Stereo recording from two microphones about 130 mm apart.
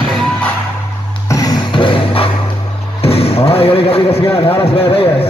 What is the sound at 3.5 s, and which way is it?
Speech, 50° left (ahead or behind).